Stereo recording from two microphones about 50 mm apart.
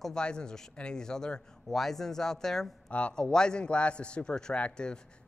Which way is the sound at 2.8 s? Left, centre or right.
Left.